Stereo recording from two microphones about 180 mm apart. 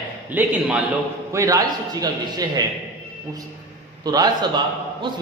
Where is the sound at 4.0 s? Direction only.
20° right (ahead or behind).